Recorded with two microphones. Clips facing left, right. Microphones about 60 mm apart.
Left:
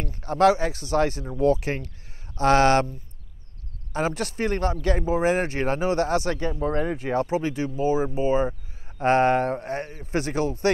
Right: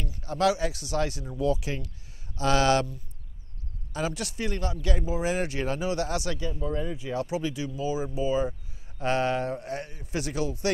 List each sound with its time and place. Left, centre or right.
0.0 s speech: left
6.5 s speech: left